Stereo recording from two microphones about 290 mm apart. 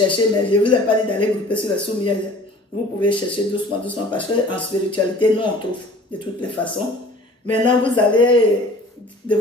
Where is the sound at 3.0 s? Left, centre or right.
Centre.